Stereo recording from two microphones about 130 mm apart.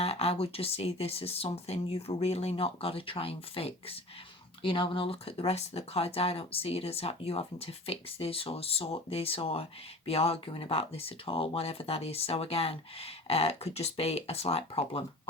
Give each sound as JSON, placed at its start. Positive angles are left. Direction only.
{"t": 0.0, "sound": "speech", "side_deg": 50}